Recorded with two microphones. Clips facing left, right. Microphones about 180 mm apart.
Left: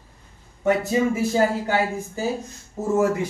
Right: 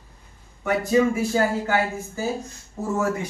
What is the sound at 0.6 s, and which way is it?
Speech, 25° left (ahead or behind).